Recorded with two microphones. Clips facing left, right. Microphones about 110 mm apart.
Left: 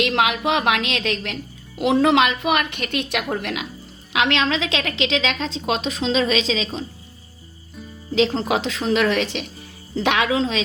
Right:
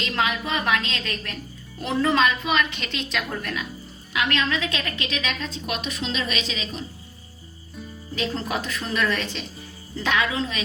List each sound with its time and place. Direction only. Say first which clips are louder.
0.0 s a woman's voice: left 6 dB; 75° left (ahead or behind)
4.1 s a woman's voice: left 4 dB; 90° left
8.1 s a woman's voice: left 8 dB; 90° left